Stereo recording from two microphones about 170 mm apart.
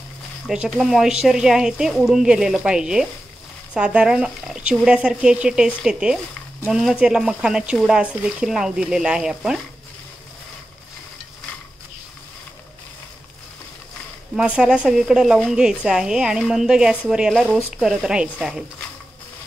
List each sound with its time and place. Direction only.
0.7 s speech: centre (ahead or behind)
14.3 s speech: 5° right (ahead or behind)